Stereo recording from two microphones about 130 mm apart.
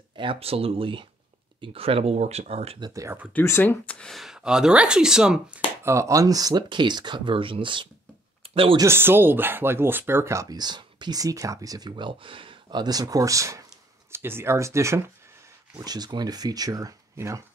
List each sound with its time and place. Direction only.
0.1 s speech: 40° right (ahead or behind)
2.8 s speech: 25° right (ahead or behind)
3.3 s speech: 15° left (ahead or behind); by 5.6 s 5° right (ahead or behind)
5.9 s speech: 25° right (ahead or behind); by 7.9 s 40° right (ahead or behind)
8.4 s a sound: 45° right (ahead or behind)
8.7 s speech: 20° right (ahead or behind)